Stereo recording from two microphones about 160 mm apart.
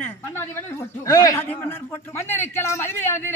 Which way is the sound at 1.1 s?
20° left (ahead or behind).